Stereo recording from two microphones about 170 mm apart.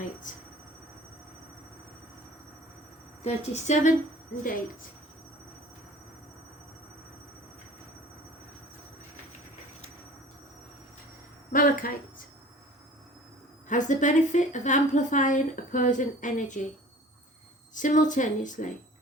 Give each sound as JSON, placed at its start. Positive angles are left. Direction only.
{"t": 0.3, "sound": "speech", "side_deg": 50}
{"t": 3.2, "sound": "a woman's voice", "side_deg": 40}
{"t": 11.5, "sound": "speech", "side_deg": 55}
{"t": 13.7, "sound": "a woman's voice", "side_deg": 45}
{"t": 17.7, "sound": "a woman's voice", "side_deg": 50}